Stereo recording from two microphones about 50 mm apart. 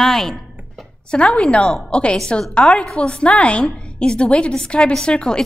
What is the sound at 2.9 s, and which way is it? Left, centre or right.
A woman's voice, left.